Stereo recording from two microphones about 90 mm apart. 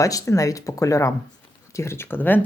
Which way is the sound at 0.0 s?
40° left (ahead or behind).